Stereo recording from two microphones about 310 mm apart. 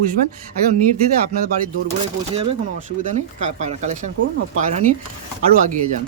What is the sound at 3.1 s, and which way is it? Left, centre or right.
Speech, right.